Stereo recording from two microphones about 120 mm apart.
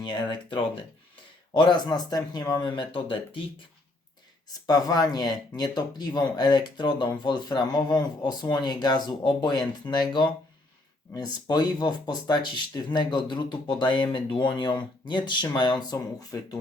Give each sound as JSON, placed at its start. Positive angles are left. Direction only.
{"t": 0.0, "sound": "speech", "side_deg": 40}
{"t": 4.6, "sound": "speech", "side_deg": 30}
{"t": 11.4, "sound": "speech", "side_deg": 35}